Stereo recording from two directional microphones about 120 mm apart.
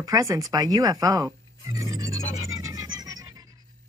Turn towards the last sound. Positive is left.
turn(degrees=-30)  # may be behind; listen again after turning